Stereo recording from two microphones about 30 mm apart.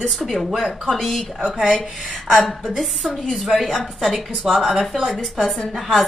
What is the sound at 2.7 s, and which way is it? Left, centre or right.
Speech, centre.